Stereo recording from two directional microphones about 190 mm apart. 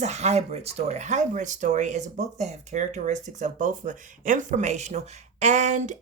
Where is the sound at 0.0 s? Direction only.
35° right (ahead or behind).